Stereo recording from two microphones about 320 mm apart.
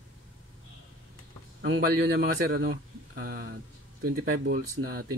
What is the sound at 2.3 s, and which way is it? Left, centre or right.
Speech, right.